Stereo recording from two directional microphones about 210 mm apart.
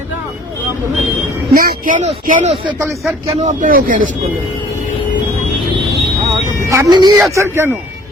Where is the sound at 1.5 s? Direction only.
40° right (ahead or behind).